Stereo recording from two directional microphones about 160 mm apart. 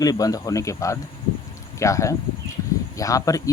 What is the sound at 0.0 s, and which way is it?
Speech, 20° left (ahead or behind).